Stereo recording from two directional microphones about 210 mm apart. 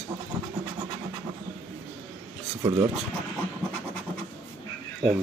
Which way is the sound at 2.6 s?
20° right (ahead or behind).